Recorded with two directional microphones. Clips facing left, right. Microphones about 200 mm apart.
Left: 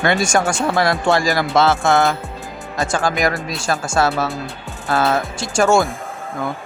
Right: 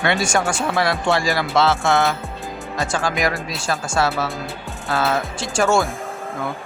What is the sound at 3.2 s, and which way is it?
Speech, 45° left (ahead or behind).